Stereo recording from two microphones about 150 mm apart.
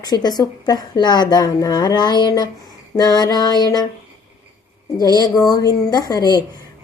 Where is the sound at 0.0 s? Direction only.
25° left (ahead or behind).